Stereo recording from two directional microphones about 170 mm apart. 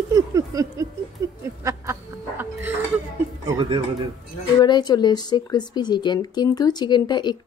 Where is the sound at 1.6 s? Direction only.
15° right (ahead or behind).